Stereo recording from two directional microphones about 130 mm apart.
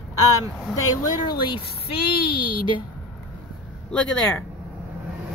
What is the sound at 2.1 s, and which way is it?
Speech, 40° left (ahead or behind).